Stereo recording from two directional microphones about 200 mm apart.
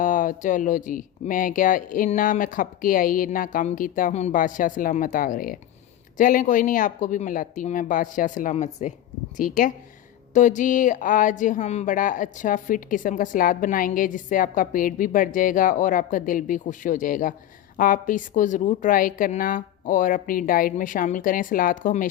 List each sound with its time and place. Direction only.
0.0 s speech: 40° left (ahead or behind)